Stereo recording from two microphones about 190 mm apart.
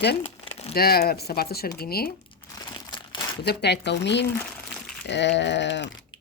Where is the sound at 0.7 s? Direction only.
55° left (ahead or behind).